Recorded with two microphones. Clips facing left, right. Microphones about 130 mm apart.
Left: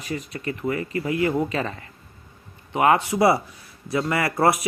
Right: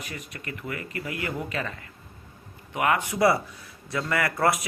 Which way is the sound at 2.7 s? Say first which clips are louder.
Left 6 dB; 30° left (ahead or behind).